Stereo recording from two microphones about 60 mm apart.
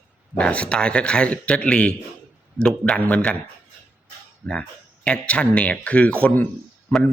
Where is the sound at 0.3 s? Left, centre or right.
Centre.